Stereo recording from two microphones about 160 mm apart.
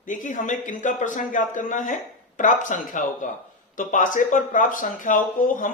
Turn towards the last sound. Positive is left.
turn(degrees=55)  # may be behind; listen again after turning